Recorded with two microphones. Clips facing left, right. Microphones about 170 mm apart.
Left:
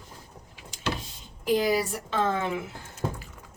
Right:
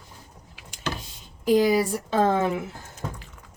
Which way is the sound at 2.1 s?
40° right (ahead or behind).